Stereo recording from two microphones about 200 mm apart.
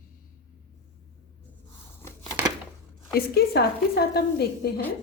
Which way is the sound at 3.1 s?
50° left (ahead or behind).